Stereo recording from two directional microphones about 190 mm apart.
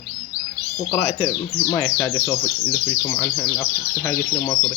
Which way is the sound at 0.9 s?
15° left (ahead or behind).